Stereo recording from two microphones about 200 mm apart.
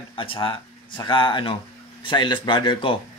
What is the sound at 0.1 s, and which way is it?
Speech, 25° left (ahead or behind).